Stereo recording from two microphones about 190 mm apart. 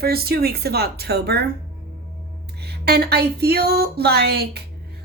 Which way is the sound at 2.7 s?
55° right (ahead or behind).